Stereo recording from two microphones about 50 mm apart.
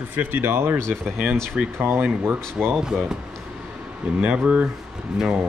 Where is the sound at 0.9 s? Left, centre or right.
Right.